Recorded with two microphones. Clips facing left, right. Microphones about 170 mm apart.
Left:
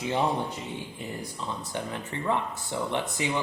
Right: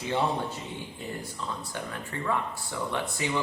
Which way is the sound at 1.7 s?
20° left (ahead or behind).